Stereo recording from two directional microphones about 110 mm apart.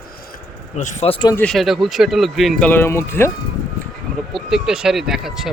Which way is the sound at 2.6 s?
20° left (ahead or behind).